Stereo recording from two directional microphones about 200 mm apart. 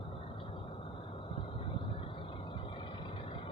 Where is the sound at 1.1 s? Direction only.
25° left (ahead or behind).